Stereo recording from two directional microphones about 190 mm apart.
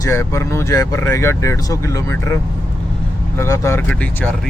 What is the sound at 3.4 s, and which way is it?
Speech, 15° left (ahead or behind).